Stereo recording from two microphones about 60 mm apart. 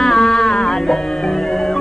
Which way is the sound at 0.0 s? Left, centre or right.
Centre.